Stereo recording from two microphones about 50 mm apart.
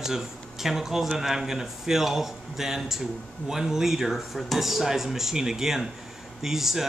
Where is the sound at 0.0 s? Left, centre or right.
Centre.